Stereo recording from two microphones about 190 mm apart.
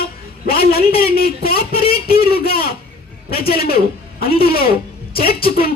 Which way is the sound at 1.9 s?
55° left (ahead or behind).